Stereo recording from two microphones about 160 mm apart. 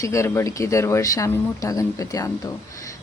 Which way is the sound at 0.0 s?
20° left (ahead or behind).